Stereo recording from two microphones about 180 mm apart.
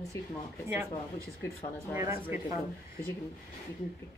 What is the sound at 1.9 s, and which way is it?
Speech, 15° right (ahead or behind).